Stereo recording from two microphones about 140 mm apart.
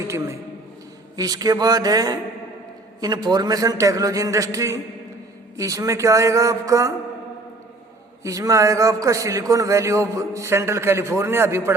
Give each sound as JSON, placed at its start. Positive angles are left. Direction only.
{"t": 1.1, "sound": "a man's voice", "side_deg": -25}
{"t": 8.2, "sound": "a man's voice", "side_deg": -25}